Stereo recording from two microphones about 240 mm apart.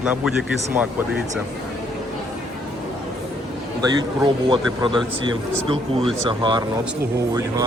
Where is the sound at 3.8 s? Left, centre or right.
Centre.